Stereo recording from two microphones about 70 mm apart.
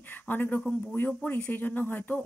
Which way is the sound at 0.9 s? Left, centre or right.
Left.